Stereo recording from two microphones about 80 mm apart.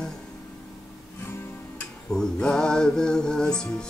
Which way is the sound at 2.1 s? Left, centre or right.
Centre.